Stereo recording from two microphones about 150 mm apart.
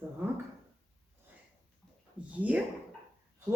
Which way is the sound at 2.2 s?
10° right (ahead or behind).